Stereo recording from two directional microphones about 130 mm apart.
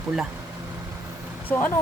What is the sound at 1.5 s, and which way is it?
Speech, 15° left (ahead or behind).